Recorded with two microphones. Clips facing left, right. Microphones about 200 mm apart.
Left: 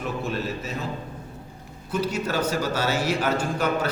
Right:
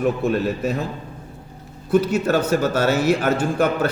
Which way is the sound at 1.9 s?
50° right (ahead or behind).